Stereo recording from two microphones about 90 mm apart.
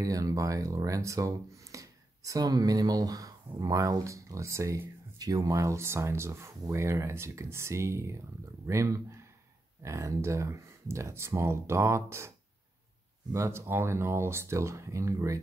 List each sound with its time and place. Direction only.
0.0 s speech: 40° right (ahead or behind)
13.3 s speech: 30° right (ahead or behind)